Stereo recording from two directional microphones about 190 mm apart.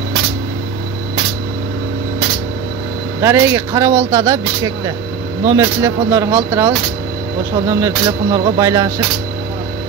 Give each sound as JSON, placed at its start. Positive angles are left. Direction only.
{"t": 3.2, "sound": "speech", "side_deg": -15}